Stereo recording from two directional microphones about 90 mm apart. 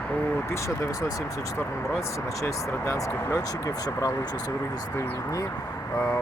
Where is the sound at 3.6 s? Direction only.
45° left (ahead or behind).